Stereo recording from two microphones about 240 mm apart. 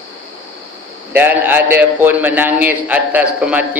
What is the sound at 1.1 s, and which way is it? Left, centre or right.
A man's voice, centre.